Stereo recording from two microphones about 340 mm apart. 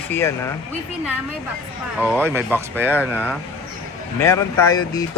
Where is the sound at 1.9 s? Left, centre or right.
Centre.